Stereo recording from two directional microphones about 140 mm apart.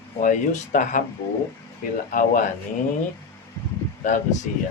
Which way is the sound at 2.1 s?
75° left (ahead or behind).